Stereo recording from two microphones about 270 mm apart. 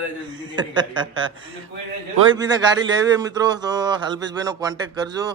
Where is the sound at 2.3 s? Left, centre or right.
Centre.